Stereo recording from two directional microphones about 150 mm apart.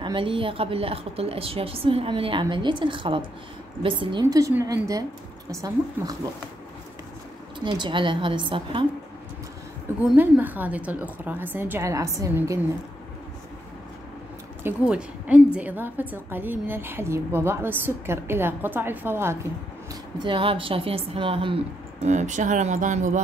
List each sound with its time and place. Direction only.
0.0 s a woman's voice: 35° right (ahead or behind)
7.6 s a woman's voice: 30° right (ahead or behind)
10.1 s a woman's voice: 10° right (ahead or behind)
14.6 s a woman's voice: 10° right (ahead or behind)
19.9 s a woman's voice: 30° right (ahead or behind)
22.0 s speech: 50° right (ahead or behind)